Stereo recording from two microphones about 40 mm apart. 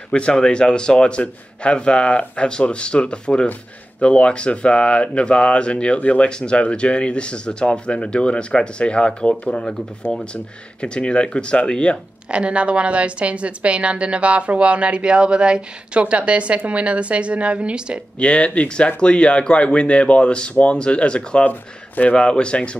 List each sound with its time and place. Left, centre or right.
0.1 s speech: left
12.3 s a woman's voice: right
18.2 s speech: left
21.5 s speech: left
22.1 s speech: left